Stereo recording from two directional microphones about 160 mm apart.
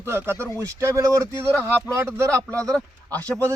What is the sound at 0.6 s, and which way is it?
Speech, 20° right (ahead or behind).